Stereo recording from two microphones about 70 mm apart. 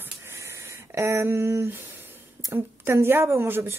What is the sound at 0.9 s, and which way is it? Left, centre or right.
A woman's voice, right.